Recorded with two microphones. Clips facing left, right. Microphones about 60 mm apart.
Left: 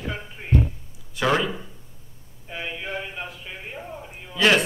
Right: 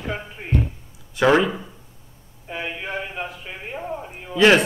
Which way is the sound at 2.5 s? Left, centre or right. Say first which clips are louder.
Right 3 dB; right.